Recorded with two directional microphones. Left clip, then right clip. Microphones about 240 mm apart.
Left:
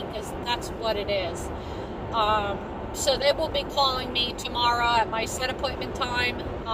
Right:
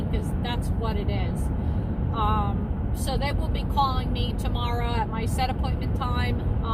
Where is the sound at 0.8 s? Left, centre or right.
Left.